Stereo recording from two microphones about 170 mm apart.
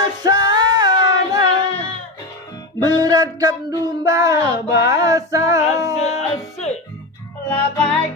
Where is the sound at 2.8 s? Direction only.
25° right (ahead or behind).